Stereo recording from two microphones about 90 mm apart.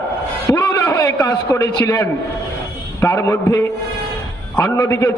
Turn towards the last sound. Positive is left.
turn(degrees=35)  # may be behind; listen again after turning